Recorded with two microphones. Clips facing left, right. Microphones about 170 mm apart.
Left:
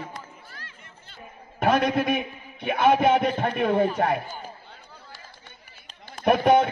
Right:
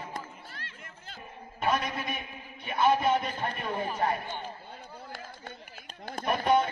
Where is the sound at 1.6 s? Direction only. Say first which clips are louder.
Left 8 dB; 70° left (ahead or behind).